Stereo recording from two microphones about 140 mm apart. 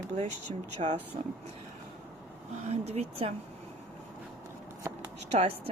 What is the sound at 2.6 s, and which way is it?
Speech, 50° right (ahead or behind).